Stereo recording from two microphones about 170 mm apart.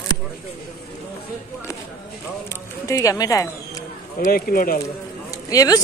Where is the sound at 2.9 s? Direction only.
20° left (ahead or behind).